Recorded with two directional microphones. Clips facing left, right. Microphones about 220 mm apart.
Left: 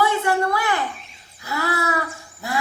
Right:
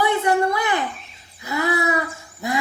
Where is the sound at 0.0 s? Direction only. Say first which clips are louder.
Right 1 dB; 20° right (ahead or behind).